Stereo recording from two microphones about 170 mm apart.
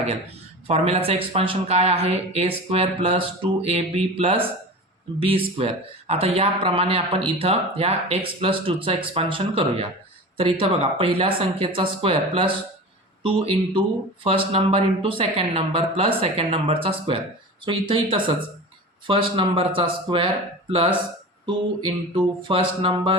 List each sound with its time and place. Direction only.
0.7 s speech: 35° right (ahead or behind)